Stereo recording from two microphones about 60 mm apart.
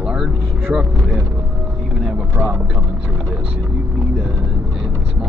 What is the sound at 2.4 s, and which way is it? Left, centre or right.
Speech, right.